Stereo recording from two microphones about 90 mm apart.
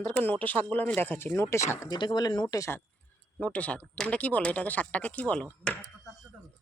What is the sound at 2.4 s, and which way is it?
Speech, 35° left (ahead or behind).